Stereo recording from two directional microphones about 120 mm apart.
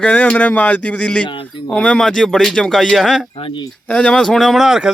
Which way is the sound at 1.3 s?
40° left (ahead or behind).